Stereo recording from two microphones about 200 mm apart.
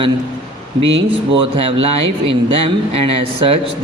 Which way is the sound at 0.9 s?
65° right (ahead or behind).